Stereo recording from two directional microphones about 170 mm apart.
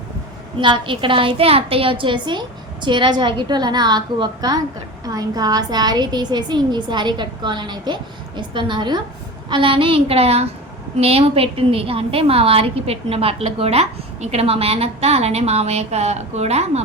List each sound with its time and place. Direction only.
0.6 s a woman's voice: 30° right (ahead or behind)